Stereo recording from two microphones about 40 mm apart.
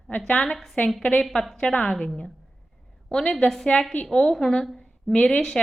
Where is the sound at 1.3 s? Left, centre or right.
Centre.